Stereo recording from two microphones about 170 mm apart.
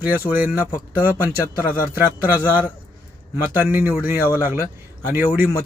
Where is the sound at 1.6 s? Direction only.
55° left (ahead or behind).